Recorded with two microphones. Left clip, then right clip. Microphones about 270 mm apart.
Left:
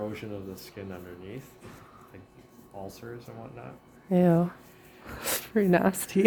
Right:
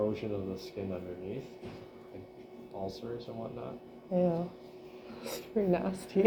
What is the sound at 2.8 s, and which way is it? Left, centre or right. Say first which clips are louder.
Speech: right 3 dB; left.